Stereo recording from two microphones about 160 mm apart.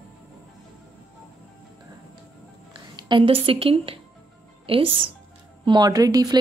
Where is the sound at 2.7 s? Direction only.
30° right (ahead or behind).